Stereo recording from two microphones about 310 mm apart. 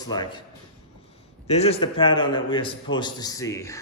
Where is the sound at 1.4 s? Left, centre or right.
Centre.